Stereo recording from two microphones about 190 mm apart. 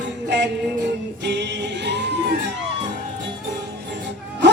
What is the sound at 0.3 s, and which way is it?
Music, 65° right (ahead or behind).